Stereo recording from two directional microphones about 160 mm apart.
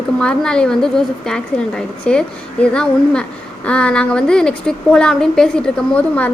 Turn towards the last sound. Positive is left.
turn(degrees=10)  # may be behind; listen again after turning